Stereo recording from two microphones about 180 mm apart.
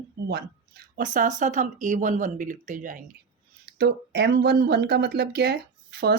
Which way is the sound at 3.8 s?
70° right (ahead or behind).